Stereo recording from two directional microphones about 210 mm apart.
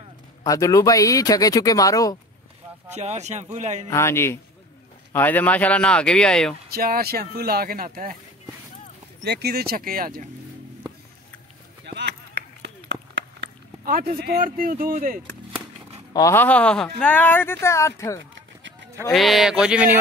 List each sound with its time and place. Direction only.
0.4 s speech: 15° left (ahead or behind)
2.9 s speech: 30° right (ahead or behind)
3.9 s speech: 10° left (ahead or behind)
6.7 s speech: 45° right (ahead or behind)
9.2 s speech: 50° right (ahead or behind)
11.8 s a sound: 55° right (ahead or behind)
14.9 s speech: 40° right (ahead or behind)
16.1 s speech: 15° left (ahead or behind)
19.1 s speech: centre (ahead or behind)